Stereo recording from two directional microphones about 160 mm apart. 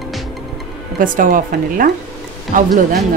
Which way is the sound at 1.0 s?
55° right (ahead or behind).